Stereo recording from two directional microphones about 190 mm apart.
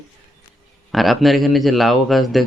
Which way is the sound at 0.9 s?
Centre (ahead or behind).